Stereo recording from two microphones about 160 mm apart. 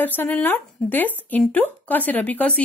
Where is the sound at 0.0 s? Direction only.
10° left (ahead or behind).